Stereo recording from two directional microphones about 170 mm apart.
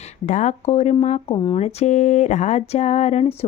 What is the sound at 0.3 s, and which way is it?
Speech, 45° left (ahead or behind).